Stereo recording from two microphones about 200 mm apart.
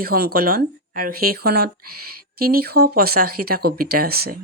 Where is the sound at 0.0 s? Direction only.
50° right (ahead or behind).